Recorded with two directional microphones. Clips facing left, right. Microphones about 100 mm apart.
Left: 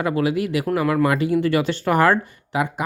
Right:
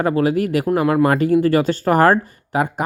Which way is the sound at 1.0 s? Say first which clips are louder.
Right 4 dB; 45° right (ahead or behind).